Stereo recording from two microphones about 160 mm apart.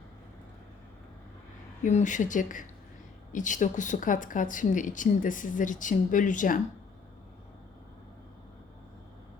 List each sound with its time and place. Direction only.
1.8 s speech: 50° left (ahead or behind)